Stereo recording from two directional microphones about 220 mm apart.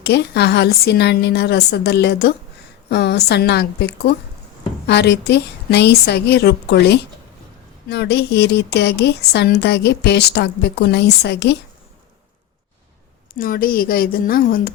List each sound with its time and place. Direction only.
0.0 s speech: 50° left (ahead or behind)
13.3 s a woman's voice: 40° left (ahead or behind)